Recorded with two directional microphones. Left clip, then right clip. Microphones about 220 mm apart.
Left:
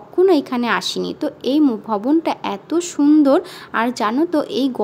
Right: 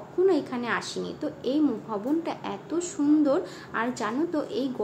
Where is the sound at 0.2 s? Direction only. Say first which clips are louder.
Left 9 dB; 50° left (ahead or behind).